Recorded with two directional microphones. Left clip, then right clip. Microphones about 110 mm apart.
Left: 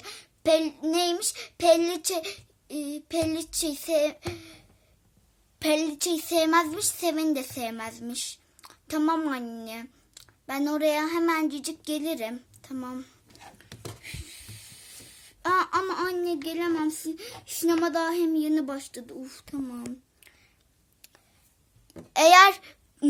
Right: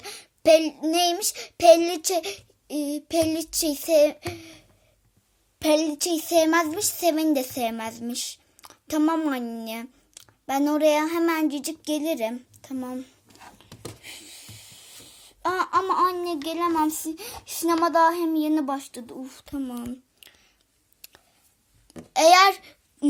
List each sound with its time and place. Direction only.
0.0 s babbling: 35° right (ahead or behind)
0.9 s child singing: 40° right (ahead or behind)
5.5 s child singing: 15° right (ahead or behind)
7.3 s a woman's voice: 30° right (ahead or behind)
9.0 s child singing: 20° right (ahead or behind)
9.6 s a child's voice: 30° right (ahead or behind); by 13.4 s 10° right (ahead or behind)
14.0 s a sound: 10° right (ahead or behind)
14.5 s music: 15° right (ahead or behind)
15.3 s a sound: 5° right (ahead or behind)
16.3 s speech: 10° right (ahead or behind)
18.3 s child singing: 20° right (ahead or behind)
18.7 s speech: 15° right (ahead or behind)
21.0 s a sound: 15° right (ahead or behind)
21.8 s babbling: 25° left (ahead or behind)